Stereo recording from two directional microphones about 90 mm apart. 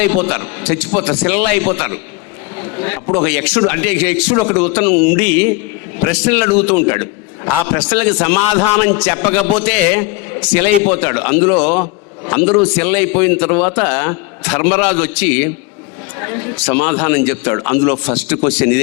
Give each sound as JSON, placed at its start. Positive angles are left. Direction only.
{"t": 0.2, "sound": "a man's voice", "side_deg": 20}
{"t": 6.6, "sound": "a man's voice", "side_deg": 20}